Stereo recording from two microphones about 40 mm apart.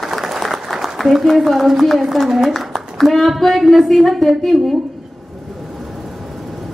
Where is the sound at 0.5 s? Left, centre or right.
Centre.